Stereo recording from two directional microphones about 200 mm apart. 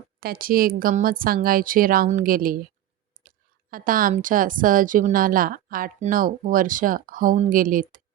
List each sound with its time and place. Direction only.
0.2 s a woman's voice: 45° right (ahead or behind)